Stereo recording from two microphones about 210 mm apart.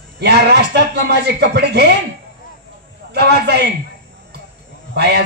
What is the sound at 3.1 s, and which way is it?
Speech, 50° right (ahead or behind).